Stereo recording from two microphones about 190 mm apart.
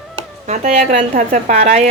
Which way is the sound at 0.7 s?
40° right (ahead or behind).